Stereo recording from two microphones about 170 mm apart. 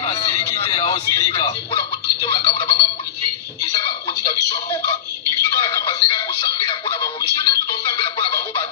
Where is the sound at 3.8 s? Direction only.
30° left (ahead or behind).